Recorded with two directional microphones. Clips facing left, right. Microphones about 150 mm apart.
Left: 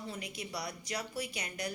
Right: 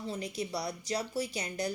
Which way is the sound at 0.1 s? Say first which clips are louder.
Right 9 dB; 30° right (ahead or behind).